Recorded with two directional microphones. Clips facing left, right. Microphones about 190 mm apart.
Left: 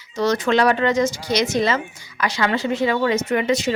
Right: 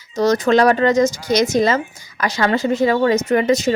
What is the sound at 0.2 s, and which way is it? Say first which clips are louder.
A woman's voice: right 4 dB; 40° right (ahead or behind).